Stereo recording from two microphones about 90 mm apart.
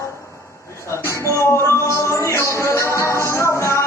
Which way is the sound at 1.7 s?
30° left (ahead or behind).